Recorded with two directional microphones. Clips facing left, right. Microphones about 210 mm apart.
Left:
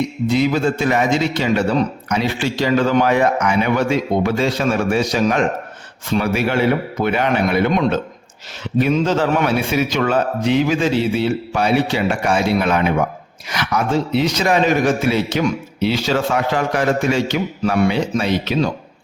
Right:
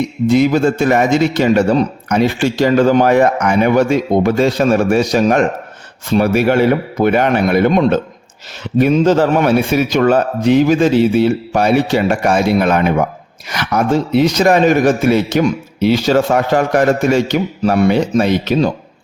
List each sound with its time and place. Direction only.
0.3 s a man's voice: 45° right (ahead or behind)